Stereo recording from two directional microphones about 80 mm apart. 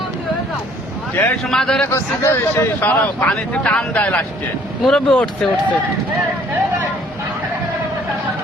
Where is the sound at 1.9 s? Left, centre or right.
Left; by 5.5 s centre.